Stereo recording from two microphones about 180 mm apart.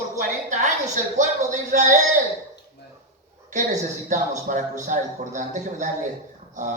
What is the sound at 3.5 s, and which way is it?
Speech, 40° right (ahead or behind).